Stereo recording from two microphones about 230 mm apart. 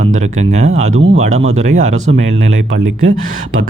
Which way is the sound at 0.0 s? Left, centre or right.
Right.